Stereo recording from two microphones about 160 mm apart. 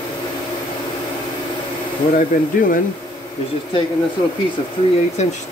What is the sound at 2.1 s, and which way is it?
Speech, 60° left (ahead or behind).